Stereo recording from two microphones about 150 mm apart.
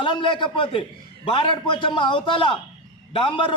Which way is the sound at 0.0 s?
30° left (ahead or behind).